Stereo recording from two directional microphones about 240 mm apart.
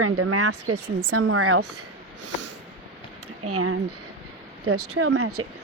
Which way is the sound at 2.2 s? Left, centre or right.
Right.